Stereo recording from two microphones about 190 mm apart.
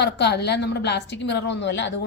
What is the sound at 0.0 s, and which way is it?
A woman's voice, 60° left (ahead or behind).